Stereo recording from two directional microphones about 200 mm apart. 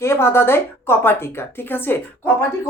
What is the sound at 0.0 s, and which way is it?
A woman's voice, 15° left (ahead or behind).